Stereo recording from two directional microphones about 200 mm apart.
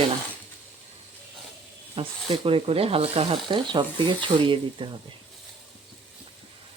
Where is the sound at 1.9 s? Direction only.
25° right (ahead or behind).